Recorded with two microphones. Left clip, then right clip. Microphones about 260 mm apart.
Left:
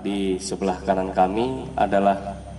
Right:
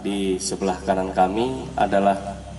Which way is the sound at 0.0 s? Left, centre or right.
Centre.